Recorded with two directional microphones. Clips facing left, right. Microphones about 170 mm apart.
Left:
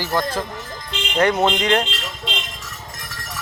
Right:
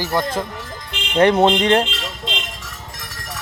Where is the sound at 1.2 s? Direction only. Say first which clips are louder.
Right 4 dB; 30° right (ahead or behind).